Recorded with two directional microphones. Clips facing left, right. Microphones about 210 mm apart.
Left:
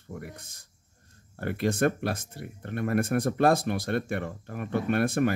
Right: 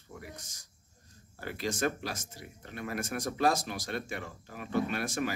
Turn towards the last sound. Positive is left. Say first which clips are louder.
# left 8 dB
turn(degrees=55)  # may be behind; listen again after turning